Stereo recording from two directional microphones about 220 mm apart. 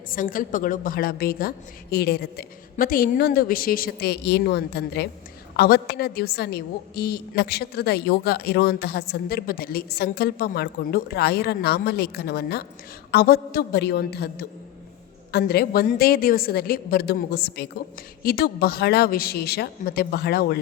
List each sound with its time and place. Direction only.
0.1 s a woman's voice: 40° left (ahead or behind)